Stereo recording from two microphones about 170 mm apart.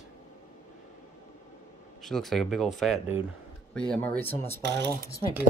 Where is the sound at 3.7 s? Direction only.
5° left (ahead or behind).